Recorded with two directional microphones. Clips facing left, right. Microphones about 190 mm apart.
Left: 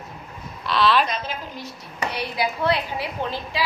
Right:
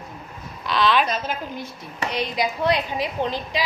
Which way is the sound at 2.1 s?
15° right (ahead or behind).